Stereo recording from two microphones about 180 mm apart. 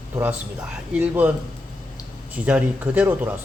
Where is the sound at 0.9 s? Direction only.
10° right (ahead or behind).